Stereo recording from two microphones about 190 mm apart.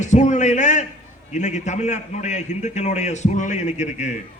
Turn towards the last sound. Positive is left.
turn(degrees=35)  # may be behind; listen again after turning